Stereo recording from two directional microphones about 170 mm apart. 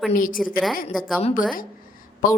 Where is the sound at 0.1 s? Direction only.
55° left (ahead or behind).